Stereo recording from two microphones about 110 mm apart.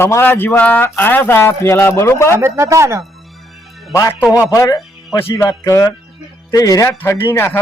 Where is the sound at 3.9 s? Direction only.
25° left (ahead or behind).